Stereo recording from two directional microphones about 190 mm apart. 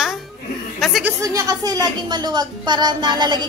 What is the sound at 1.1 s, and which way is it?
A woman's voice, 15° right (ahead or behind).